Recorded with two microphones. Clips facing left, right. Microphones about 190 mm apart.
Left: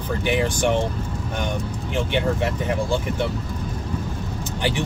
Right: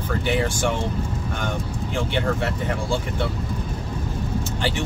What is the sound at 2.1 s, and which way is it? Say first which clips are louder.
Speech: left 2 dB; 15° left (ahead or behind).